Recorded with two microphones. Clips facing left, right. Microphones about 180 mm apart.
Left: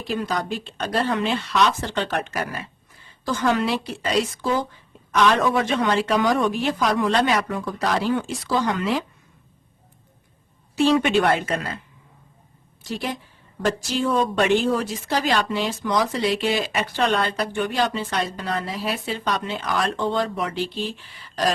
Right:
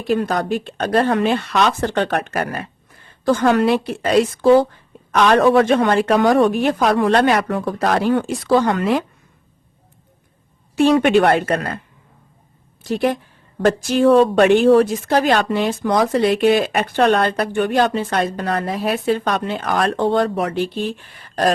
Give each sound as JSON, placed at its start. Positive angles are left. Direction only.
{"t": 0.0, "sound": "speech", "side_deg": -55}
{"t": 10.8, "sound": "speech", "side_deg": -60}
{"t": 12.8, "sound": "a woman's voice", "side_deg": -55}